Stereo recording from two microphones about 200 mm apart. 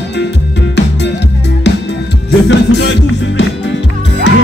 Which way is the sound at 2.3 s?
60° left (ahead or behind).